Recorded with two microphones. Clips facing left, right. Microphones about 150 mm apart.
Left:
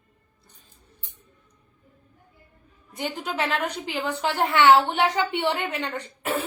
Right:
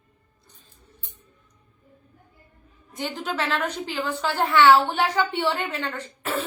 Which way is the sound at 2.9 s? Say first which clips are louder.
Even; 15° left (ahead or behind).